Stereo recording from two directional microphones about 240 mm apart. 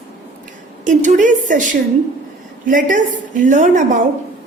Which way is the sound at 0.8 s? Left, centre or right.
Right.